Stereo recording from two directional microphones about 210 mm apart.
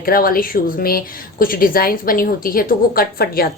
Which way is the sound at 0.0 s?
45° left (ahead or behind).